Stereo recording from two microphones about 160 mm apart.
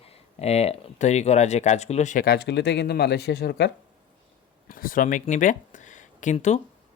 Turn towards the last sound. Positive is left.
turn(degrees=45)  # may be behind; listen again after turning